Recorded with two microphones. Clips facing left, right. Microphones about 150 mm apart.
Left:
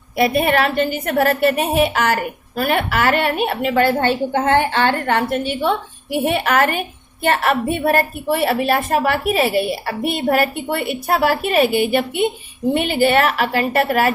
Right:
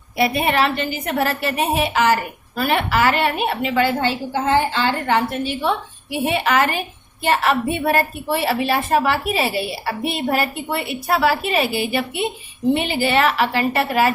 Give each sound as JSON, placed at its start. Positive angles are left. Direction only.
{"t": 0.2, "sound": "a woman's voice", "side_deg": 50}